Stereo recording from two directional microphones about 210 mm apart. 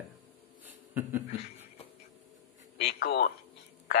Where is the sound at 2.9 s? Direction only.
50° left (ahead or behind).